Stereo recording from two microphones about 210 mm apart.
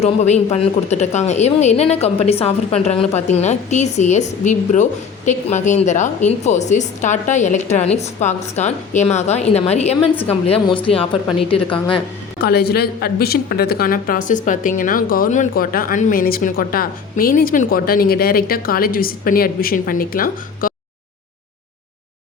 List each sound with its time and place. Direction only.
0.0 s a woman's voice: 30° left (ahead or behind)
12.4 s a woman's voice: 50° left (ahead or behind)